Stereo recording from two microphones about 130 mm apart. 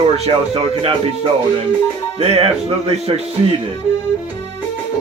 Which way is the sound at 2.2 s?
50° right (ahead or behind).